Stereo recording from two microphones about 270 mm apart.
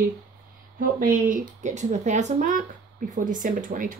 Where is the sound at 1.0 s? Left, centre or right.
Right.